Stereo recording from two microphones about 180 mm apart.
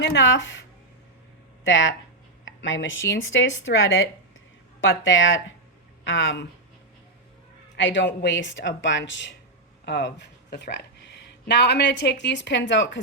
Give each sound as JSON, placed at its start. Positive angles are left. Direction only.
{"t": 0.0, "sound": "speech", "side_deg": 85}
{"t": 1.6, "sound": "speech", "side_deg": 90}
{"t": 7.8, "sound": "speech", "side_deg": 85}
{"t": 9.8, "sound": "a woman's voice", "side_deg": 70}